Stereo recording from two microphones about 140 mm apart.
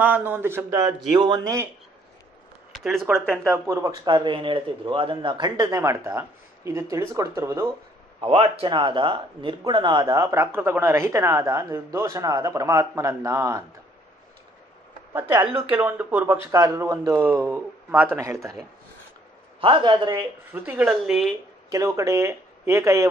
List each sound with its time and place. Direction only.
0.0 s speech: 10° right (ahead or behind)
1.2 s speech: 30° right (ahead or behind)
2.7 s speech: centre (ahead or behind)
3.4 s speech: 20° right (ahead or behind)
8.2 s speech: 45° right (ahead or behind); by 13.7 s 20° right (ahead or behind)
15.2 s a man's voice: 35° right (ahead or behind)
15.7 s speech: 15° right (ahead or behind)
19.6 s a man's voice: 35° right (ahead or behind)
20.2 s speech: 15° right (ahead or behind)
21.6 s speech: 25° right (ahead or behind)